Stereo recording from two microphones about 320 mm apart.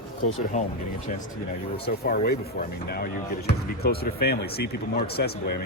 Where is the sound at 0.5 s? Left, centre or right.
Left.